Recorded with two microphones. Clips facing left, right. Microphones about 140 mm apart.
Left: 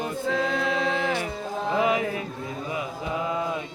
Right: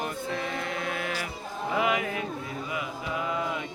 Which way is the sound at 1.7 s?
35° left (ahead or behind).